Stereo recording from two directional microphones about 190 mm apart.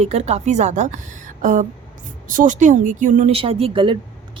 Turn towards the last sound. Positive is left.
turn(degrees=-25)  # may be behind; listen again after turning